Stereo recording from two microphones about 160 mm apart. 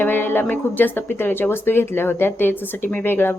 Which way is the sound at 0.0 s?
15° left (ahead or behind).